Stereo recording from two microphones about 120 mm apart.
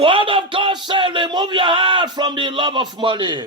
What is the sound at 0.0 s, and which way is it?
Music, 45° right (ahead or behind).